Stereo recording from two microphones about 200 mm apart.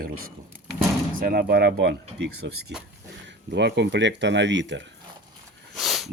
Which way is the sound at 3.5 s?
60° right (ahead or behind).